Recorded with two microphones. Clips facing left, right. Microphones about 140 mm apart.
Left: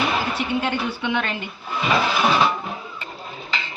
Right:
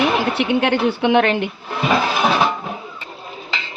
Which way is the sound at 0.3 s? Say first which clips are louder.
Right 6 dB; 70° right (ahead or behind).